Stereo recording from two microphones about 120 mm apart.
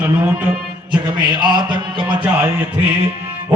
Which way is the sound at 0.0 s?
15° right (ahead or behind).